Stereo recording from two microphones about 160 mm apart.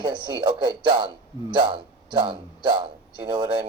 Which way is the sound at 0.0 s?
30° right (ahead or behind).